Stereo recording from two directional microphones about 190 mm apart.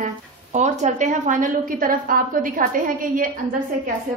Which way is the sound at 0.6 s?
40° right (ahead or behind).